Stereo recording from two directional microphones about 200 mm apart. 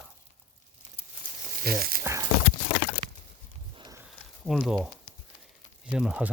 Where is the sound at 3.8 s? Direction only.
20° right (ahead or behind).